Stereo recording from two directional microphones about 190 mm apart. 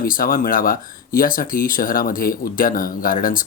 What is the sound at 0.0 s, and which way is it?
Speech, 50° left (ahead or behind).